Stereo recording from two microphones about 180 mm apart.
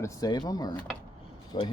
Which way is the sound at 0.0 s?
20° left (ahead or behind).